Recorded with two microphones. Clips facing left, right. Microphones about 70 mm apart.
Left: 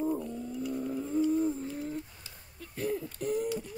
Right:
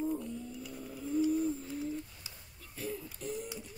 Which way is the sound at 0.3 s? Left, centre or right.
Left.